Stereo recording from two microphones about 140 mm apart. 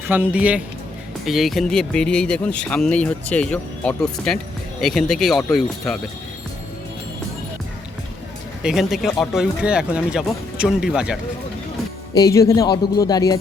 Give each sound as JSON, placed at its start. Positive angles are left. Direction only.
{"t": 0.1, "sound": "a man's voice", "side_deg": -10}
{"t": 8.6, "sound": "speech", "side_deg": 0}
{"t": 12.1, "sound": "speech", "side_deg": 25}